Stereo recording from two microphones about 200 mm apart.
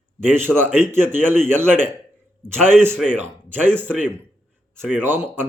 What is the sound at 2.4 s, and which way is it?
Speech, 5° left (ahead or behind).